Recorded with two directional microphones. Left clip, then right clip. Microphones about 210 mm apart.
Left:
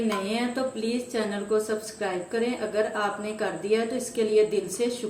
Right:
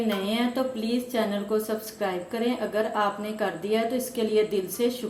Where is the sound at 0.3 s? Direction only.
30° right (ahead or behind).